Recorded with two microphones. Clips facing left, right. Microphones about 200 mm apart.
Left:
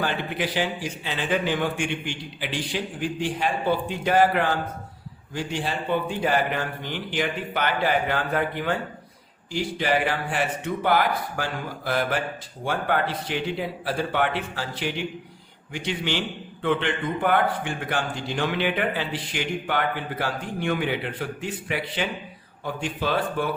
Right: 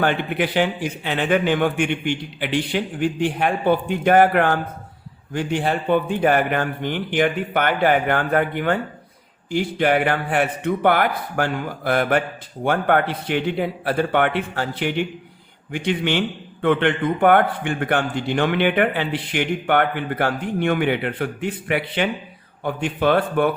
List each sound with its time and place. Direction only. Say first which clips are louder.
0.0 s a man's voice: right 6 dB; 60° right (ahead or behind)